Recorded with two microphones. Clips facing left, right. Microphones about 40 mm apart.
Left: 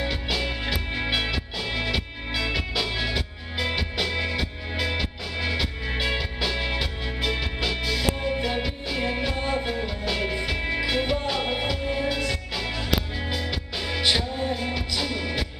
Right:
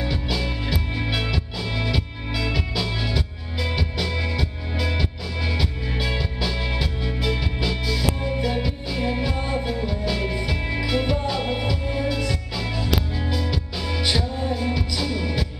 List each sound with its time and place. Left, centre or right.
0.0 s music: left